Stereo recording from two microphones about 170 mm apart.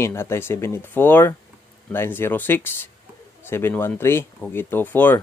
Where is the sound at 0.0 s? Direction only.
15° left (ahead or behind).